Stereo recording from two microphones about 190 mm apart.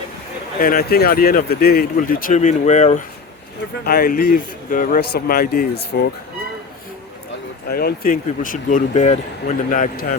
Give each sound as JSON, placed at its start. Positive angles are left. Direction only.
{"t": 0.6, "sound": "speech", "side_deg": 50}
{"t": 3.8, "sound": "speech", "side_deg": 50}
{"t": 7.7, "sound": "speech", "side_deg": 55}